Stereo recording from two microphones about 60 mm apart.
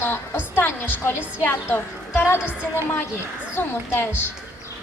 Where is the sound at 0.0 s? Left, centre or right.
Left.